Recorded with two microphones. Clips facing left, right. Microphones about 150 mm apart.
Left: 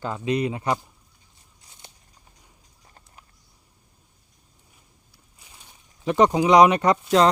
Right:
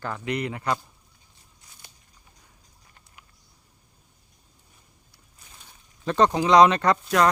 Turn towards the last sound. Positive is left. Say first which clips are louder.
# left 3 dB
turn(degrees=20)  # may be behind; listen again after turning